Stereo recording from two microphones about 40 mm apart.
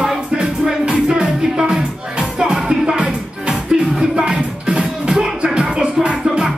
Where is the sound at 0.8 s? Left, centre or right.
Right.